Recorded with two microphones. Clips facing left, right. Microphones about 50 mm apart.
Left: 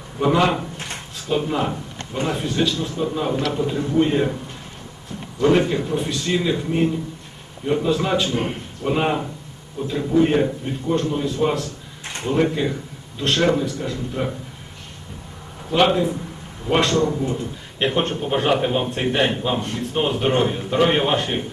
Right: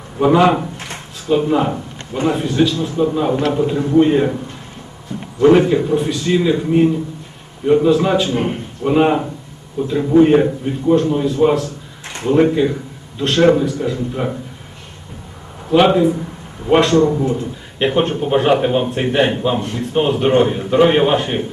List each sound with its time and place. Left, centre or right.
0.2 s a man's voice: centre
3.8 s a man's voice: centre
5.4 s a man's voice: centre
15.7 s a man's voice: centre
17.0 s a man's voice: centre
17.7 s a man's voice: centre